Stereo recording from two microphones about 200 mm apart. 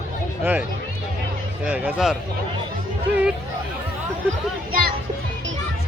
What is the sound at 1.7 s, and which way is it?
Speech, 10° right (ahead or behind).